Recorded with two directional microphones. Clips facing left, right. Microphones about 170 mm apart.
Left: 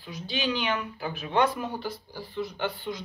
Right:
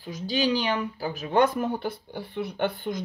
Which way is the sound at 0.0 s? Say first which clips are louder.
Right 5 dB; 40° right (ahead or behind).